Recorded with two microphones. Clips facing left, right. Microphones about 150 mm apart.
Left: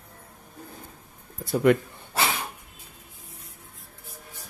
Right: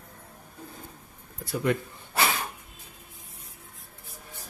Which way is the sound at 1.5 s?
65° left (ahead or behind).